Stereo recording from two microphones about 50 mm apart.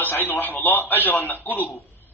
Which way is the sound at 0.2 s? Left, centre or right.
Left.